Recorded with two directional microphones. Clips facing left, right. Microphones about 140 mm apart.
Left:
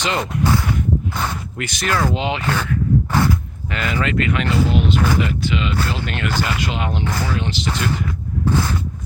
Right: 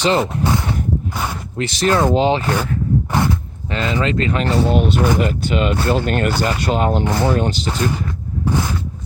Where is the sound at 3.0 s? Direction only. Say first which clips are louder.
Even; 20° right (ahead or behind).